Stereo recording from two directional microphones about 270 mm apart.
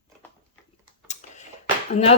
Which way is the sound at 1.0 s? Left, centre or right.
Left.